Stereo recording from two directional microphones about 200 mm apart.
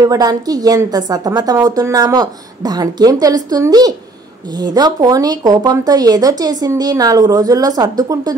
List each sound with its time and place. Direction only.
0.0 s a woman's voice: 20° right (ahead or behind)